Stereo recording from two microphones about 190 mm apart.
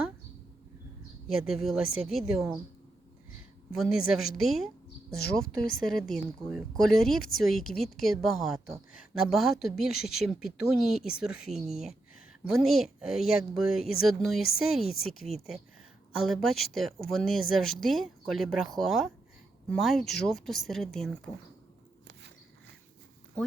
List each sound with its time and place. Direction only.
1.4 s speech: centre (ahead or behind)
3.7 s speech: 5° right (ahead or behind)
15.3 s speech: 35° right (ahead or behind)
16.1 s speech: centre (ahead or behind)